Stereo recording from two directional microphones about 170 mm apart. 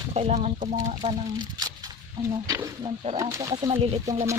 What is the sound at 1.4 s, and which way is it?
Speech, 20° right (ahead or behind).